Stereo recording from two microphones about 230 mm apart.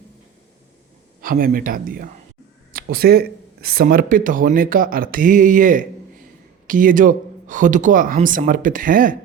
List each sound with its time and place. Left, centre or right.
1.2 s speech: right